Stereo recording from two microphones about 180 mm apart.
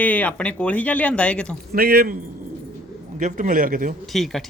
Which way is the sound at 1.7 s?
55° right (ahead or behind).